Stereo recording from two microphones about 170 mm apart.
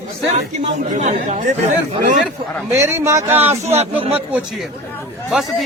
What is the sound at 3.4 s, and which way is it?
Speech, 40° right (ahead or behind).